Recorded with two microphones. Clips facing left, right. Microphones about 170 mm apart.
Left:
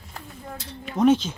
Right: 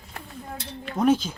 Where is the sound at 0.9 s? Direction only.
10° right (ahead or behind).